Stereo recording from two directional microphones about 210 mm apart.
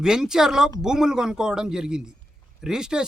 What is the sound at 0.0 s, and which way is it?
Speech, 5° right (ahead or behind).